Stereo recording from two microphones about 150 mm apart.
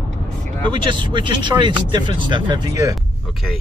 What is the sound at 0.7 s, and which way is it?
Speech, 30° right (ahead or behind).